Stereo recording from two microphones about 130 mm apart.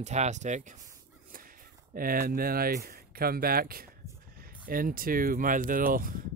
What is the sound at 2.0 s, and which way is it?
Speech, 90° right.